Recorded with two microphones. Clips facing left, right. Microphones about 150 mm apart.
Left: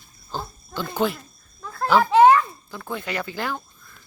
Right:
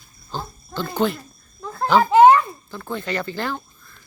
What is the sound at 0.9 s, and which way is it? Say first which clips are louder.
Speech: right 2 dB; 5° left (ahead or behind).